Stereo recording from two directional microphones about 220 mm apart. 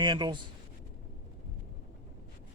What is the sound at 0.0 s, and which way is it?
Speech, 20° right (ahead or behind).